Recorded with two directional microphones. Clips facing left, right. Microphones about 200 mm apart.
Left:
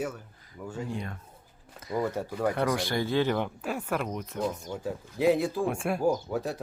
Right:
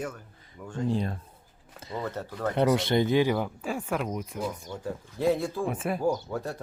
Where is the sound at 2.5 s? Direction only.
25° right (ahead or behind).